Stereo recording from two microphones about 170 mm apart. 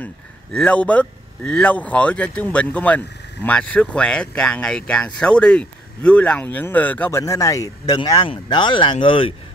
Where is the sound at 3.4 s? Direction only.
5° left (ahead or behind).